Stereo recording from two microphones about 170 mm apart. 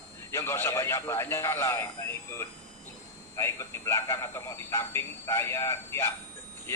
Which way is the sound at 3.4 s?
15° left (ahead or behind).